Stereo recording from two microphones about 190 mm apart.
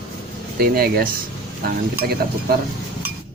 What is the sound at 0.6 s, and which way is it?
Speech, 50° right (ahead or behind).